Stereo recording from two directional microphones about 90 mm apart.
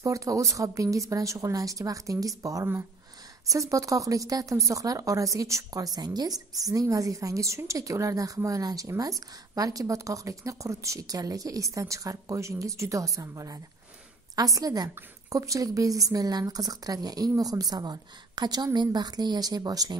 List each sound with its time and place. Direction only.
0.0 s a woman's voice: 35° right (ahead or behind)